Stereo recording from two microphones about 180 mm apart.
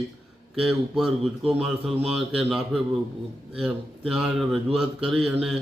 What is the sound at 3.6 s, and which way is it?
Speech, centre (ahead or behind).